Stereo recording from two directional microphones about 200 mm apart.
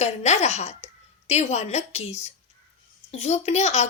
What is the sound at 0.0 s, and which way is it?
A woman's voice, 35° left (ahead or behind).